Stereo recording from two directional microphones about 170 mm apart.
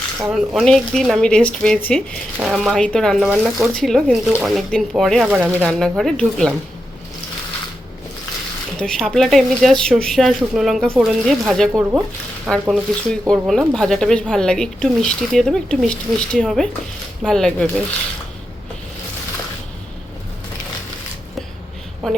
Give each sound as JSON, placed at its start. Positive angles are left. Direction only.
{"t": 0.3, "sound": "speech", "side_deg": -5}
{"t": 3.3, "sound": "speech", "side_deg": -15}
{"t": 3.8, "sound": "speech", "side_deg": 0}
{"t": 8.8, "sound": "speech", "side_deg": 5}
{"t": 11.7, "sound": "speech", "side_deg": -15}
{"t": 12.5, "sound": "speech", "side_deg": 0}
{"t": 22.0, "sound": "speech", "side_deg": 0}